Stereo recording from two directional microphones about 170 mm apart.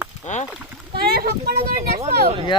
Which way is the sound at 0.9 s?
65° right (ahead or behind).